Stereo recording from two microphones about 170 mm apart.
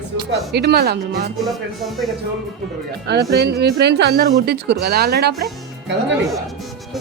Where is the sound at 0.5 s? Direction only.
75° right (ahead or behind).